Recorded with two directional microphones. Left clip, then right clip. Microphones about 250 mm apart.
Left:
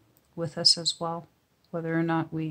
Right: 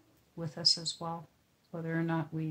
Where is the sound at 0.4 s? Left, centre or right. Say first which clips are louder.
Left 7 dB; left.